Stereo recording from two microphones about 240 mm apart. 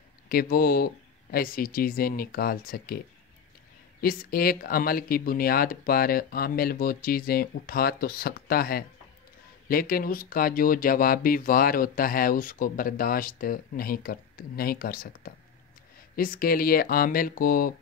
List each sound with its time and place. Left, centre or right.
0.3 s speech: left
4.0 s speech: left